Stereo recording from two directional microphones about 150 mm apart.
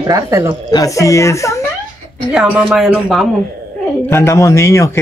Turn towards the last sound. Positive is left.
turn(degrees=20)  # may be behind; listen again after turning